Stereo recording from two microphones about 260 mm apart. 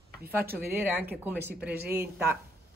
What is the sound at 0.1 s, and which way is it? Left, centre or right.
Speech, right.